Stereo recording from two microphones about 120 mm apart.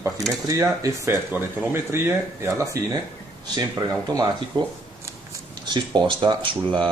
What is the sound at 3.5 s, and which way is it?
Speech, 30° right (ahead or behind).